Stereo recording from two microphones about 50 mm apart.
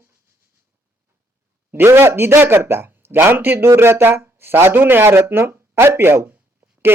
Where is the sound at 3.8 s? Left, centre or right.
Right.